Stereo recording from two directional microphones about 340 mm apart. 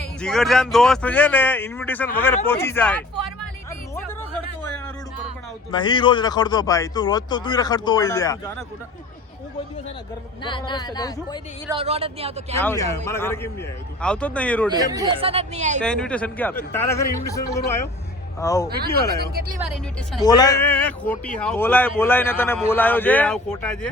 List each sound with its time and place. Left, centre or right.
0.2 s a man's voice: centre
3.9 s a sound: centre
5.7 s speech: centre
10.4 s speech: centre
11.7 s speech: centre
12.5 s a man's voice: centre
14.7 s speech: centre
15.8 s speech: centre
18.7 s speech: right
20.2 s a man's voice: centre